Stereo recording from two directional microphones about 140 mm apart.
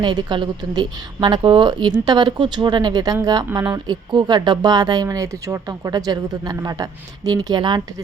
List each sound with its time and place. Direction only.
0.0 s a woman's voice: 35° right (ahead or behind)